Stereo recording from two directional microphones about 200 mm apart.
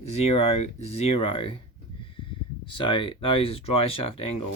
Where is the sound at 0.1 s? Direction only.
30° left (ahead or behind).